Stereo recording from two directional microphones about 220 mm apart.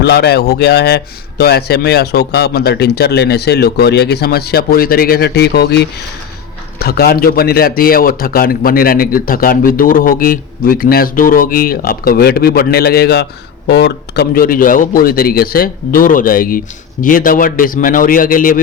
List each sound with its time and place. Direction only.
0.0 s a man's voice: 50° left (ahead or behind)